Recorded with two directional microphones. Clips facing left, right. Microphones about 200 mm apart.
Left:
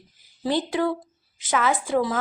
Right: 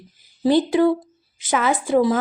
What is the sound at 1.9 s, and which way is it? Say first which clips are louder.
Speech: right 8 dB; 15° right (ahead or behind).